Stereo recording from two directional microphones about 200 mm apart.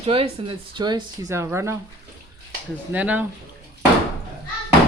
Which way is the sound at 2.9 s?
10° right (ahead or behind).